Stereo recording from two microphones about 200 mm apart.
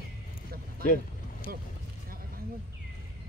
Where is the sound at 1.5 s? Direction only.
45° right (ahead or behind).